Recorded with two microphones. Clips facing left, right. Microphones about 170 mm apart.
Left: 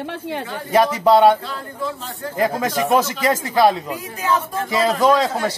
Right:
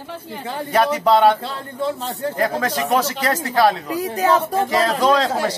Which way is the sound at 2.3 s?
10° left (ahead or behind).